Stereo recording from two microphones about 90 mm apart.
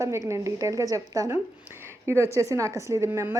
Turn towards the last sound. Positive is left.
turn(degrees=-25)  # may be behind; listen again after turning